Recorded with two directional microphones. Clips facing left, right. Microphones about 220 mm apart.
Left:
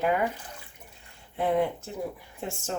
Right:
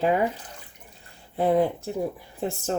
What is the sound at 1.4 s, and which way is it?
Speech, 35° right (ahead or behind).